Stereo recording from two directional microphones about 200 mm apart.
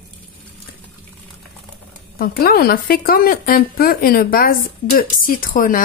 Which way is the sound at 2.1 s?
50° left (ahead or behind).